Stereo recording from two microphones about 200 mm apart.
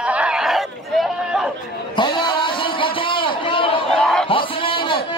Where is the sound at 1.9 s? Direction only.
25° left (ahead or behind).